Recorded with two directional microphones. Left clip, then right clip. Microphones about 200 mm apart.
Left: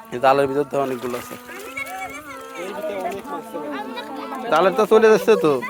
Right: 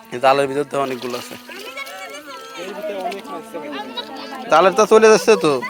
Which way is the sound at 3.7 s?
30° left (ahead or behind).